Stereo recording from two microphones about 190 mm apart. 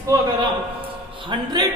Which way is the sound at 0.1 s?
15° right (ahead or behind).